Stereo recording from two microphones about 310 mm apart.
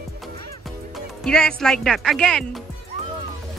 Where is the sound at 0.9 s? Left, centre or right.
Centre.